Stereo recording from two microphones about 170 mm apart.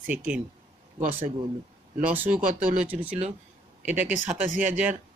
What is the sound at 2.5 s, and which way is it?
Speech, 50° right (ahead or behind).